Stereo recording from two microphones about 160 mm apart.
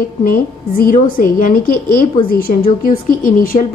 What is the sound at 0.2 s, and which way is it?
Speech, 60° left (ahead or behind).